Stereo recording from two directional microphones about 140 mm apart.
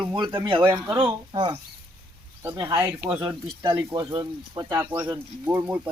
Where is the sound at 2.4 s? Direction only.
20° right (ahead or behind).